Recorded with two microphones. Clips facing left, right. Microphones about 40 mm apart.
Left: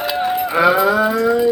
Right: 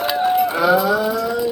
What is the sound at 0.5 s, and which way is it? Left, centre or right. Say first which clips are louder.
Moo: left 2 dB; left.